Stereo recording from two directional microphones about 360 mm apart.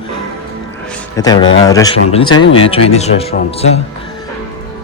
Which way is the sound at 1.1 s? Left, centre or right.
Centre.